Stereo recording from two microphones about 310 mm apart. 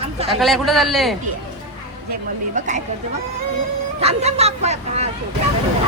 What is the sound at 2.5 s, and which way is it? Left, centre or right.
Speech, right.